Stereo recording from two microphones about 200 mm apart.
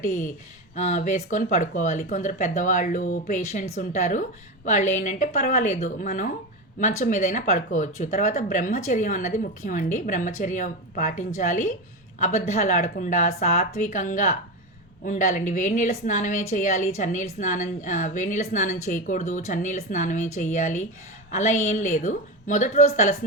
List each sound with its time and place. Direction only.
0.8 s a woman's voice: 35° left (ahead or behind)